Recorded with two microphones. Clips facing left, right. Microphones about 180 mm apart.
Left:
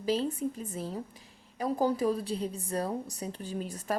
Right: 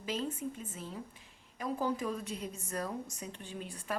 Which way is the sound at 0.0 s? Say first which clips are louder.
Left 7 dB; 35° left (ahead or behind).